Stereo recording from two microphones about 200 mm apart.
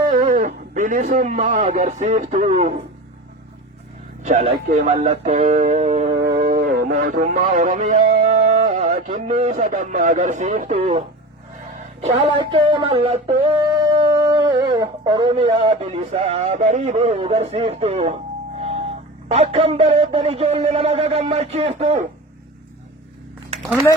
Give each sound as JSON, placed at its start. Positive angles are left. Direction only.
{"t": 0.1, "sound": "speech", "side_deg": -40}
{"t": 4.2, "sound": "a man's voice", "side_deg": -35}
{"t": 6.1, "sound": "a sound", "side_deg": -55}
{"t": 18.6, "sound": "speech", "side_deg": -30}